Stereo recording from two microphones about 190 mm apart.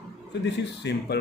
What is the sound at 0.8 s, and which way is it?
Speech, 65° left (ahead or behind).